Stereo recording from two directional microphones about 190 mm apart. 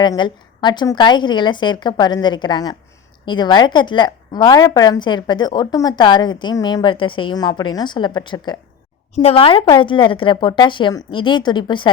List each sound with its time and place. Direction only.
0.0 s a woman's voice: 25° left (ahead or behind)